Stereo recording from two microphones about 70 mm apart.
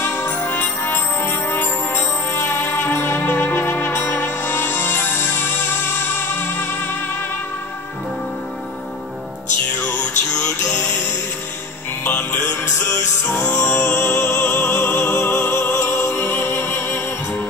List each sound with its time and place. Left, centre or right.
0.0 s music: left
10.4 s music: left
13.4 s music: left